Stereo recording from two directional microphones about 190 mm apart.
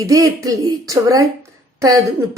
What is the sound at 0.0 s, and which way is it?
Speech, 20° right (ahead or behind).